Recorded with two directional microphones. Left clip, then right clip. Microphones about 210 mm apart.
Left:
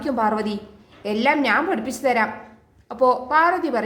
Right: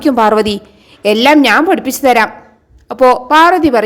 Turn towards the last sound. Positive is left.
turn(degrees=-40)  # may be behind; listen again after turning